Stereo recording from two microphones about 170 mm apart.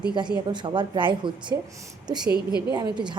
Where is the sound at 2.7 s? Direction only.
25° right (ahead or behind).